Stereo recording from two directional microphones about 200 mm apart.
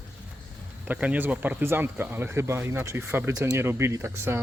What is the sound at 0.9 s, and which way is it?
Speech, 5° right (ahead or behind).